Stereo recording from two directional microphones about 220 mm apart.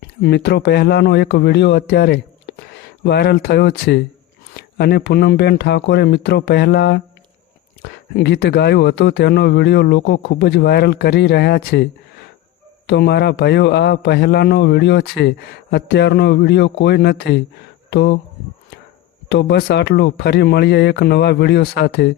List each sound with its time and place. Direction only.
0.0 s speech: 50° left (ahead or behind)
12.9 s speech: 50° left (ahead or behind)
19.3 s speech: 50° left (ahead or behind)